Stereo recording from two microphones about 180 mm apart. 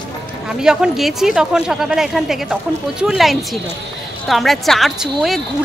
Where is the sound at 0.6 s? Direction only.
5° right (ahead or behind).